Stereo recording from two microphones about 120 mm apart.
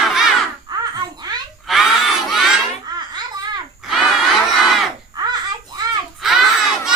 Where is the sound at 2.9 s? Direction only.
35° right (ahead or behind).